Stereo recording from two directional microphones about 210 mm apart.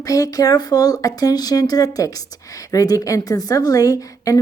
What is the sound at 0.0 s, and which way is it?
Speech, 15° left (ahead or behind).